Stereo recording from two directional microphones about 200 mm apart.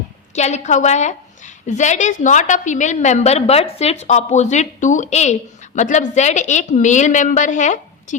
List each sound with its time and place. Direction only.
0.3 s a woman's voice: 35° left (ahead or behind)